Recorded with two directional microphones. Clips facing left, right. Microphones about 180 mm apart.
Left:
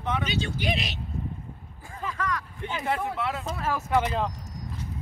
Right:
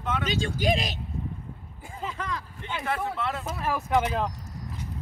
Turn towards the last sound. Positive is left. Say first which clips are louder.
# even
turn(degrees=-5)  # may be behind; listen again after turning